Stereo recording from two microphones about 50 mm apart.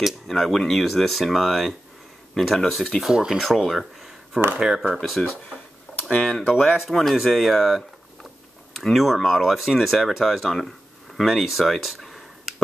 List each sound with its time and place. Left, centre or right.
0.3 s speech: centre
3.0 s speech: centre
3.4 s a sound: centre
4.6 s speech: centre
5.9 s computer keyboard: centre
6.2 s speech: centre
11.2 s a sound: centre